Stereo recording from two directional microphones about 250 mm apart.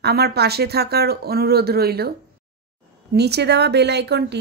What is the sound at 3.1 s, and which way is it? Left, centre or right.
A woman's voice, right.